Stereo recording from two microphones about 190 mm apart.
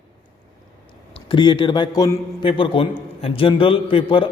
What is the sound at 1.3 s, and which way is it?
A man's voice, 25° left (ahead or behind).